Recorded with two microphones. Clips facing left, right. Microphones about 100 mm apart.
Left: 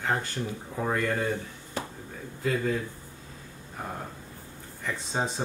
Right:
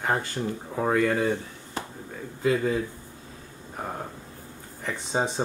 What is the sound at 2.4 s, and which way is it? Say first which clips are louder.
Speech: right 4 dB; 20° right (ahead or behind).